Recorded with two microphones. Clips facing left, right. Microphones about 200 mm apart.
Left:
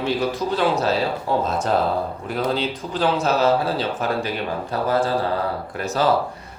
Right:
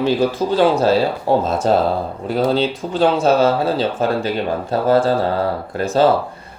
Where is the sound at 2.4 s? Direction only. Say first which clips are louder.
Right 6 dB; 25° right (ahead or behind).